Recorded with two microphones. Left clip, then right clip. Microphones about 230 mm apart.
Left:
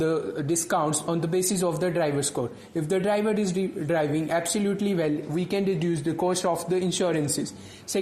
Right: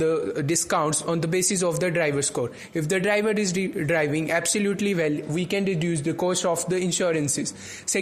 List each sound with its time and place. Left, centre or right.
0.0 s speech: right